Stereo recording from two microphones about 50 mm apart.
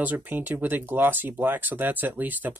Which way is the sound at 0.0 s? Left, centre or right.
Right.